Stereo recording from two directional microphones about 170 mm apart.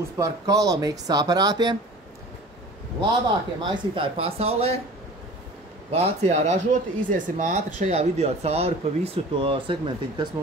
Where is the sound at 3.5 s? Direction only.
25° right (ahead or behind).